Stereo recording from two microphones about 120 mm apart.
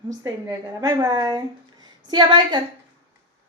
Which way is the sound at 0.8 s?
30° right (ahead or behind).